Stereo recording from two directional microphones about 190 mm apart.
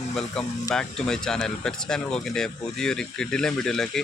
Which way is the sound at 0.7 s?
5° left (ahead or behind).